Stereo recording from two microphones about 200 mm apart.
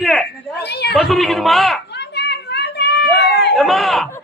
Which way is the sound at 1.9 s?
55° left (ahead or behind).